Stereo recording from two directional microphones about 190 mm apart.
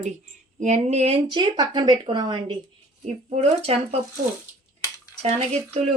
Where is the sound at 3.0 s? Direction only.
35° right (ahead or behind).